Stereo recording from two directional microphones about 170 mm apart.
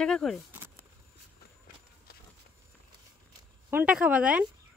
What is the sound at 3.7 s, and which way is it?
Speech, 5° right (ahead or behind).